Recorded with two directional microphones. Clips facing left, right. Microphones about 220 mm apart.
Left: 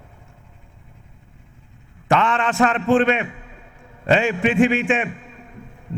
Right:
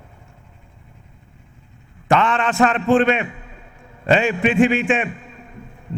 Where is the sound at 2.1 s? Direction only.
15° right (ahead or behind).